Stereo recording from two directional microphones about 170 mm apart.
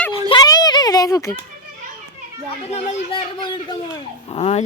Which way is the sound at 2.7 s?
35° left (ahead or behind).